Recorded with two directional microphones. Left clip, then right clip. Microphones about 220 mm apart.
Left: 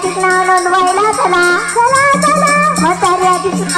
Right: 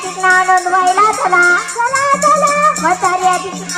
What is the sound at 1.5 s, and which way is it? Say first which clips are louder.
Music: left 4 dB; 55° right (ahead or behind).